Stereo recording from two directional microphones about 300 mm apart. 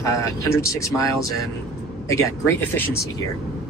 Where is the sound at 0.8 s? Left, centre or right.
Centre.